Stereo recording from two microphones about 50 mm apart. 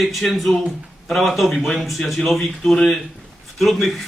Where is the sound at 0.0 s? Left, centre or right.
Centre.